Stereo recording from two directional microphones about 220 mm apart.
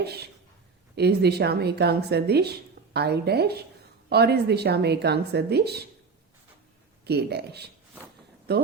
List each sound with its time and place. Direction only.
0.0 s speech: 45° right (ahead or behind)
7.0 s speech: 45° right (ahead or behind)